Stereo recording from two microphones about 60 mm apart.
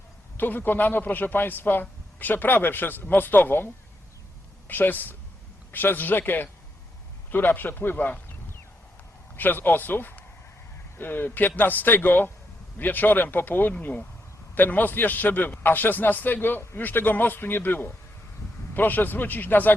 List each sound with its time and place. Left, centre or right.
0.3 s a man's voice: left
4.7 s a man's voice: left